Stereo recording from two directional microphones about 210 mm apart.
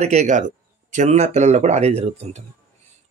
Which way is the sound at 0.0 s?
35° right (ahead or behind).